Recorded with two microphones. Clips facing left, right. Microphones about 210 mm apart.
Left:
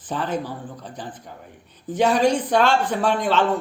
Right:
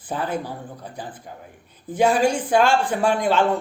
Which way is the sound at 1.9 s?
10° right (ahead or behind).